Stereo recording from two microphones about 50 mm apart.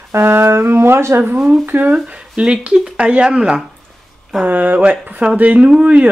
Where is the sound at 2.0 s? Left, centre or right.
Right.